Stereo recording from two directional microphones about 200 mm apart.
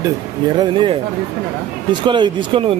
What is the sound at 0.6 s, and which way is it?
Speech, 25° right (ahead or behind).